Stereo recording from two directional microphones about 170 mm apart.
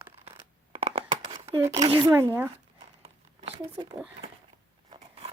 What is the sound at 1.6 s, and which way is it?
Speech, 20° right (ahead or behind).